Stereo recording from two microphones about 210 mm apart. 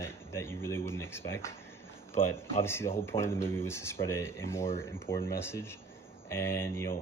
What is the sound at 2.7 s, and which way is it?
Speech, 10° left (ahead or behind).